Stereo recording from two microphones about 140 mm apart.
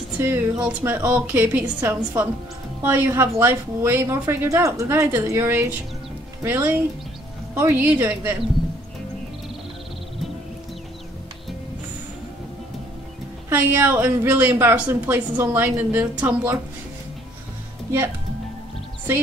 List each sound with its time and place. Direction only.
0.2 s a woman's voice: 15° right (ahead or behind)
13.5 s a woman's voice: 15° right (ahead or behind)